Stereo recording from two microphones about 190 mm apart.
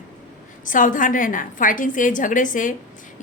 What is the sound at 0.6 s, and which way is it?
A woman's voice, 45° left (ahead or behind).